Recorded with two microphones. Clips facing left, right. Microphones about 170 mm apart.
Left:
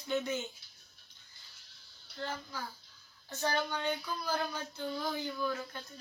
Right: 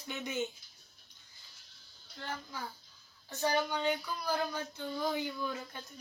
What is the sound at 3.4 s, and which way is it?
Speech, 10° right (ahead or behind).